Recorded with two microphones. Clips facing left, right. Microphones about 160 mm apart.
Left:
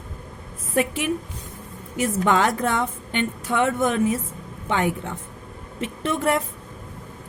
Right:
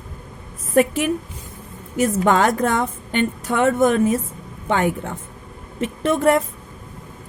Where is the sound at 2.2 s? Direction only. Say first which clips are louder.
Right 2 dB; 45° right (ahead or behind).